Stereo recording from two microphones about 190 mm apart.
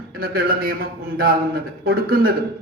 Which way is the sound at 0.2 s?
50° right (ahead or behind).